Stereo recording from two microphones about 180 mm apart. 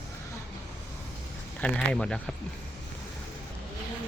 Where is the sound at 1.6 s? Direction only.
5° left (ahead or behind).